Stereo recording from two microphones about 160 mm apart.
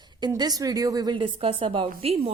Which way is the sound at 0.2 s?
25° right (ahead or behind).